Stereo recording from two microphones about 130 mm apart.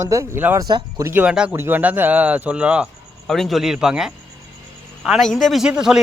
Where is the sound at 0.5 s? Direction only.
30° right (ahead or behind).